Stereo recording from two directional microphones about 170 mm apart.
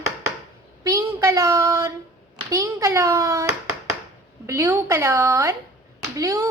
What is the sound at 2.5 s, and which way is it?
Speech, 20° right (ahead or behind).